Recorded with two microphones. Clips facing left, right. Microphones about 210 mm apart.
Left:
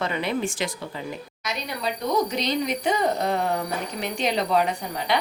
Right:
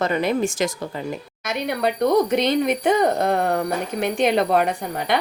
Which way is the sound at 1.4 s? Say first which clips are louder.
Right 7 dB; 60° right (ahead or behind).